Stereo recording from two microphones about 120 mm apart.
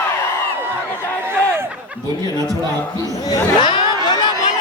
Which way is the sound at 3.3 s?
40° left (ahead or behind).